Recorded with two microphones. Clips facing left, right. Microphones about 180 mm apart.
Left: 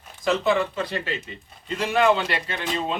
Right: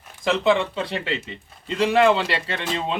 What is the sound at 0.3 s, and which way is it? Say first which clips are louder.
Speech: right 2 dB; 25° right (ahead or behind).